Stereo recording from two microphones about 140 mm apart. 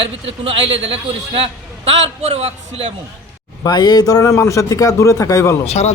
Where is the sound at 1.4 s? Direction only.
45° right (ahead or behind).